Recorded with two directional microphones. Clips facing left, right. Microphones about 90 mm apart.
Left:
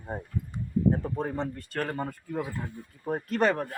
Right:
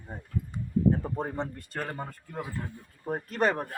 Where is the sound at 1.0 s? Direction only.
15° right (ahead or behind).